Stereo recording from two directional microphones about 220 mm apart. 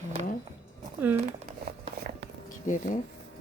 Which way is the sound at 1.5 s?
45° right (ahead or behind).